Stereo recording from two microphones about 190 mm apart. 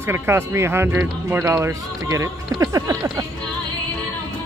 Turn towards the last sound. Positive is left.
turn(degrees=-15)  # may be behind; listen again after turning